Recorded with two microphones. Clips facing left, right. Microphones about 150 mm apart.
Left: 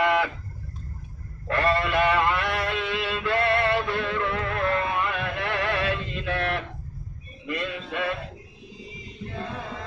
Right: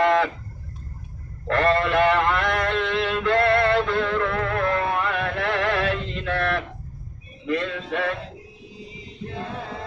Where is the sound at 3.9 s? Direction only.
70° right (ahead or behind).